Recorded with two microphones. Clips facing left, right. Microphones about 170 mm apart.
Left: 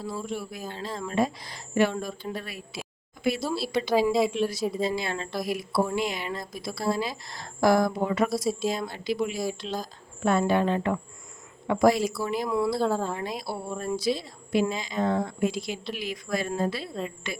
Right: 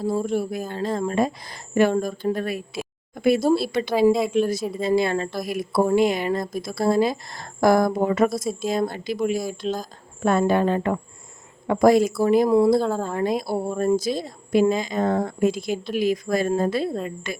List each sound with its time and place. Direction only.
0.0 s speech: 45° right (ahead or behind)
4.1 s speech: centre (ahead or behind)
4.4 s speech: 50° right (ahead or behind)
12.8 s speech: 5° left (ahead or behind)
13.1 s speech: 50° right (ahead or behind)